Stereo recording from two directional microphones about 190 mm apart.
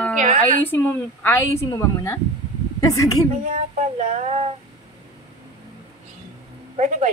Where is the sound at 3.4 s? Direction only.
40° right (ahead or behind).